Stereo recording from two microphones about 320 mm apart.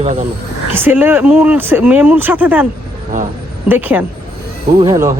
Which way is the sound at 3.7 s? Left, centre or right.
Centre.